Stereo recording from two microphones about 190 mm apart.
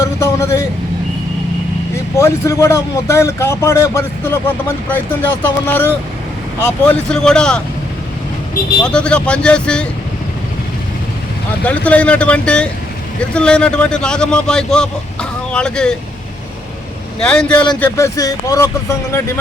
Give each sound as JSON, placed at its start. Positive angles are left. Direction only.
{"t": 0.0, "sound": "speech", "side_deg": 15}
{"t": 2.1, "sound": "a man's voice", "side_deg": 15}
{"t": 8.8, "sound": "a man's voice", "side_deg": 5}
{"t": 11.6, "sound": "a man's voice", "side_deg": 5}
{"t": 17.2, "sound": "a man's voice", "side_deg": 5}